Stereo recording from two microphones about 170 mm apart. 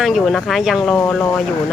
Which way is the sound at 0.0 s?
Centre (ahead or behind).